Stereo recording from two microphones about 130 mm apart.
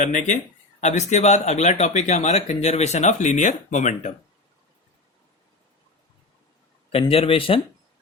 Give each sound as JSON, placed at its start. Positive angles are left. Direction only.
{"t": 0.0, "sound": "speech", "side_deg": 70}
{"t": 6.9, "sound": "speech", "side_deg": 45}